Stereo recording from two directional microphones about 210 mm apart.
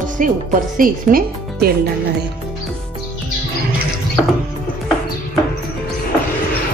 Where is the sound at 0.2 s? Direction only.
40° right (ahead or behind).